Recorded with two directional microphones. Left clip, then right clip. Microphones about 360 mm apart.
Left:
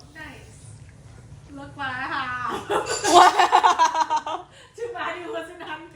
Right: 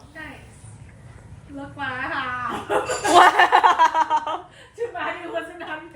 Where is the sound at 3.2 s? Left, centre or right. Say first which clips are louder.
Right 3 dB; centre.